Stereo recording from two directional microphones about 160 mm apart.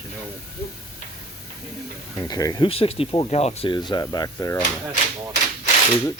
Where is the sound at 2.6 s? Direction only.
35° left (ahead or behind); by 4.5 s 20° left (ahead or behind).